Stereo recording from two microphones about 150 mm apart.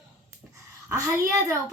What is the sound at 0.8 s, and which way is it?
Speech, 20° right (ahead or behind).